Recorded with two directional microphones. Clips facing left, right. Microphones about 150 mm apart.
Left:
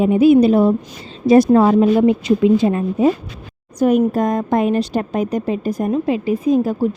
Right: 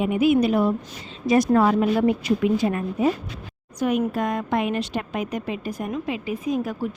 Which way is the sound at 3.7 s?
40° left (ahead or behind).